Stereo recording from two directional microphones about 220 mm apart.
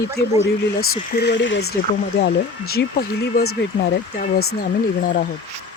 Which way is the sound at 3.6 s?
50° left (ahead or behind).